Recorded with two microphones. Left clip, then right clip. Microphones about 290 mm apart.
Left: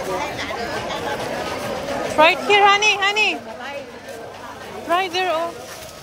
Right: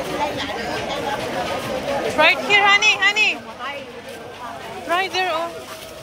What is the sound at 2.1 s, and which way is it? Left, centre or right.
Speech, centre.